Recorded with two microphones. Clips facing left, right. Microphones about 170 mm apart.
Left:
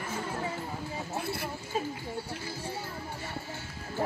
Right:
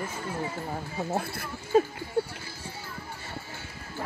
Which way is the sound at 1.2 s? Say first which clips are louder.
Left 2 dB; 50° right (ahead or behind).